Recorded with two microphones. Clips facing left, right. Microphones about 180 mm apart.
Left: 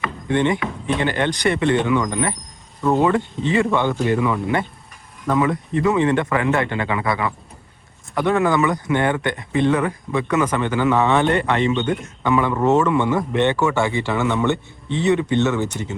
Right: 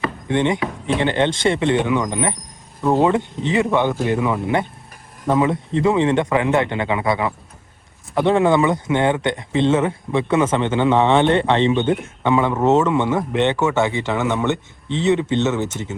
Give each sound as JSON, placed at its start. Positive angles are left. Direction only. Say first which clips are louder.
{"t": 0.3, "sound": "speech", "louder": "even", "side_deg": -20}